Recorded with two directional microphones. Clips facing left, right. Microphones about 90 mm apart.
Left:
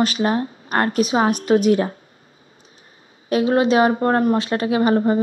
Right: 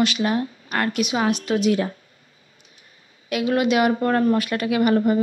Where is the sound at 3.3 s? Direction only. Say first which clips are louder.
Left 4 dB; 30° left (ahead or behind).